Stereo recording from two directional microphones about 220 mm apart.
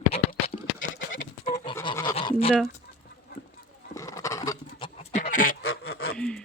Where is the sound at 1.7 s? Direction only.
15° left (ahead or behind).